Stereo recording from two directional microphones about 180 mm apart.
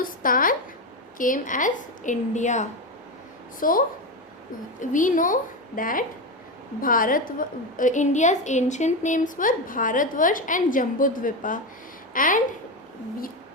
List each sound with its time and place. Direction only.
0.0 s a woman's voice: 50° left (ahead or behind)